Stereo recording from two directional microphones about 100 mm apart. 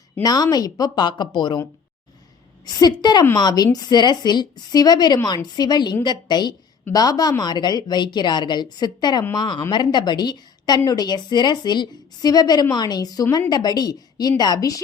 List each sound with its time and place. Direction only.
0.2 s a woman's voice: 40° left (ahead or behind)
2.8 s a woman's voice: 45° left (ahead or behind)